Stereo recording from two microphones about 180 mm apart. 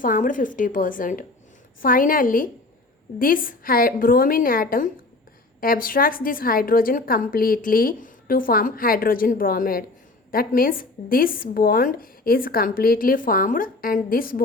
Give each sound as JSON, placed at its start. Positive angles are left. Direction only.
{"t": 0.0, "sound": "a woman's voice", "side_deg": 45}